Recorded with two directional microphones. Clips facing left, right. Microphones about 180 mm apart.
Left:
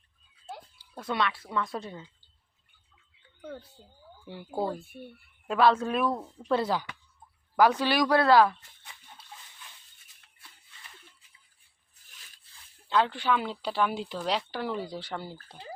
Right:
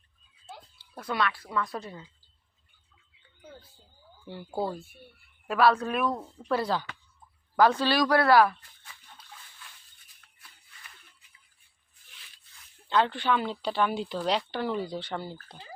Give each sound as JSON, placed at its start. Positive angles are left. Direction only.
{"t": 0.8, "sound": "a sound", "side_deg": 10}
{"t": 1.1, "sound": "speech", "side_deg": 25}
{"t": 1.5, "sound": "speech", "side_deg": 0}
{"t": 3.4, "sound": "speech", "side_deg": 65}
{"t": 5.5, "sound": "speech", "side_deg": 25}
{"t": 6.1, "sound": "speech", "side_deg": 0}
{"t": 6.5, "sound": "speech", "side_deg": 20}
{"t": 12.9, "sound": "speech", "side_deg": 5}